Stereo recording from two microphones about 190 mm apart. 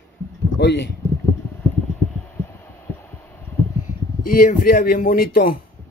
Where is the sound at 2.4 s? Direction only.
10° left (ahead or behind).